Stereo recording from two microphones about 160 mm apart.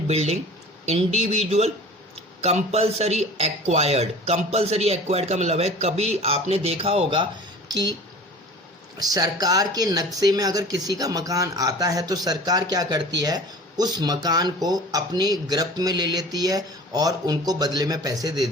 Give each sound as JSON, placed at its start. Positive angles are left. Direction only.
{"t": 0.1, "sound": "speech", "side_deg": -40}
{"t": 9.0, "sound": "speech", "side_deg": -25}